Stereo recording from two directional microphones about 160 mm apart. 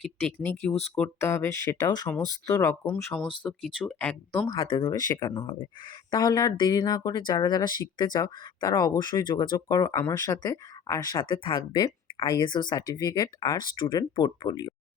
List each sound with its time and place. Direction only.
0.3 s speech: 10° left (ahead or behind)
2.8 s speech: 10° left (ahead or behind)
3.2 s speech: 30° left (ahead or behind)
3.6 s speech: 5° left (ahead or behind)
5.4 s speech: 30° left (ahead or behind)